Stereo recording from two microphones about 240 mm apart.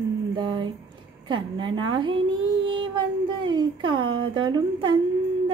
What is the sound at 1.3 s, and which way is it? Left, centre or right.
Speech, centre.